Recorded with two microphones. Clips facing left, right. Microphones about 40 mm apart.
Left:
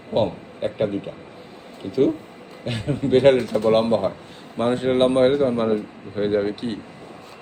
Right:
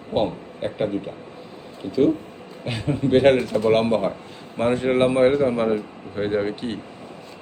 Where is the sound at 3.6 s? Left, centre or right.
Right.